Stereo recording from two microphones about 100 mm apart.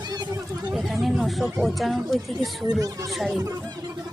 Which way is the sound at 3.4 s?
40° right (ahead or behind).